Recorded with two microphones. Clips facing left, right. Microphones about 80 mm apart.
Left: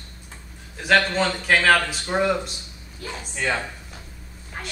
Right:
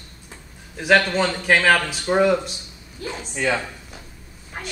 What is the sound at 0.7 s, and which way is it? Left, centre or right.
A man's voice, centre.